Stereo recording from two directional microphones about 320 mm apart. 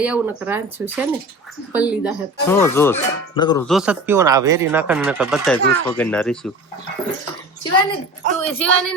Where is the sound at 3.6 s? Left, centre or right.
Centre.